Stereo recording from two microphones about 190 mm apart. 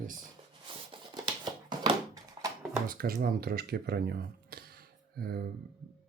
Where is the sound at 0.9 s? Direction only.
20° right (ahead or behind).